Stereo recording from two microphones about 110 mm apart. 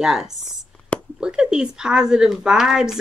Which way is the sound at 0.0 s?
5° right (ahead or behind).